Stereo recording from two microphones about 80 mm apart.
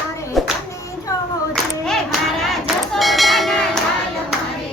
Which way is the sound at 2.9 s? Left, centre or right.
Centre.